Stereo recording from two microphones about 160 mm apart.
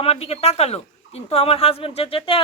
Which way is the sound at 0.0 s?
40° left (ahead or behind).